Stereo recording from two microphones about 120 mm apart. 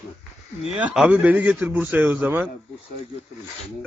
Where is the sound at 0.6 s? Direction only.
10° right (ahead or behind).